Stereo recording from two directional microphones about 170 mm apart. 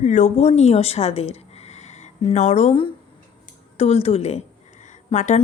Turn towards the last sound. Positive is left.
turn(degrees=40)  # may be behind; listen again after turning